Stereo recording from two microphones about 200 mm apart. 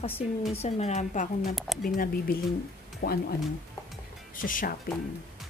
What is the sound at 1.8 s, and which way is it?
Speech, 45° left (ahead or behind).